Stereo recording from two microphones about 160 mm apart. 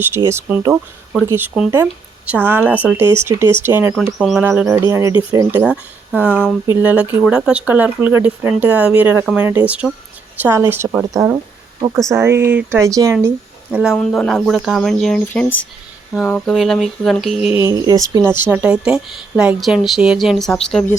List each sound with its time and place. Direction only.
0.2 s speech: 15° right (ahead or behind)
1.7 s speech: 10° right (ahead or behind)
3.9 s speech: centre (ahead or behind)
4.4 s speech: 10° right (ahead or behind)
5.6 s speech: 5° right (ahead or behind)
13.2 s speech: 10° right (ahead or behind)
17.6 s speech: 25° right (ahead or behind); by 20.9 s 5° left (ahead or behind)